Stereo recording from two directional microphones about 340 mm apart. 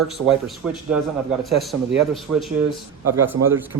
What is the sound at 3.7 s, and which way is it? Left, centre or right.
Speech, right.